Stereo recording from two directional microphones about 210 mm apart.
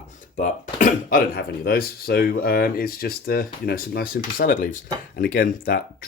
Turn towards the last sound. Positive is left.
turn(degrees=45)  # may be behind; listen again after turning